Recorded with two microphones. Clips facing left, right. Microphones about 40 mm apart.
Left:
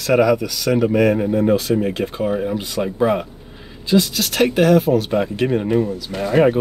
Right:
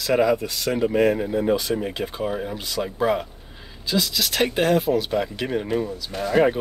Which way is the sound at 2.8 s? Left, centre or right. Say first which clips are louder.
Left 4 dB; left.